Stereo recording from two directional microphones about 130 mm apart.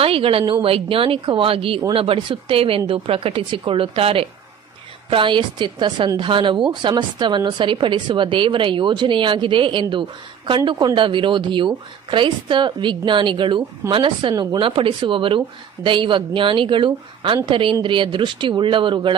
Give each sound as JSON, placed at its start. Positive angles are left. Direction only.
{"t": 0.0, "sound": "a woman's voice", "side_deg": -45}